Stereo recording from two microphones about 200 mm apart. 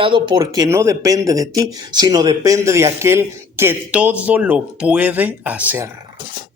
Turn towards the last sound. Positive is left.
turn(degrees=-5)  # may be behind; listen again after turning